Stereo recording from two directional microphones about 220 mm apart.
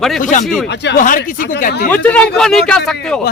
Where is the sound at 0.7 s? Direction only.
50° left (ahead or behind).